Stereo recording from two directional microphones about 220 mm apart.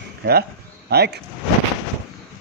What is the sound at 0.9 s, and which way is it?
Speech, 45° right (ahead or behind).